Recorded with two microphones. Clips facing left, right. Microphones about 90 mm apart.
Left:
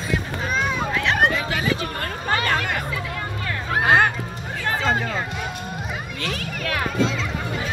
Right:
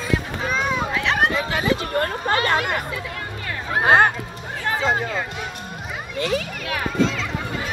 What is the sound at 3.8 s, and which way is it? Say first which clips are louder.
Speech: right 2 dB; 25° right (ahead or behind).